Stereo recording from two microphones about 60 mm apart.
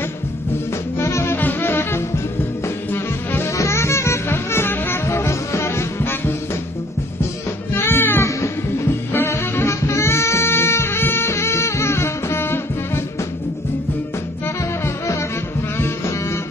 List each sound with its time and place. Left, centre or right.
0.9 s music: left
3.5 s music: left
7.7 s music: left